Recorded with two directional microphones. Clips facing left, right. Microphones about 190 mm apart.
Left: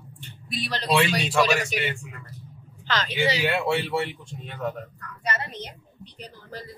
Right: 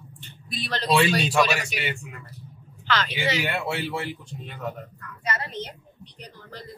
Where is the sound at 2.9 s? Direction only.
40° left (ahead or behind).